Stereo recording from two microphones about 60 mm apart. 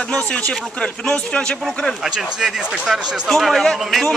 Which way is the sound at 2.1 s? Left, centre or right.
Centre.